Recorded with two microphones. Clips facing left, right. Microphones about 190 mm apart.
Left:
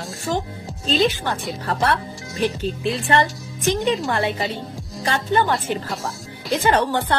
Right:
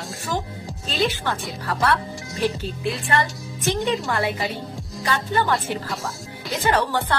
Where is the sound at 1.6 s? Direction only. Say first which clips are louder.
Even; 25° left (ahead or behind).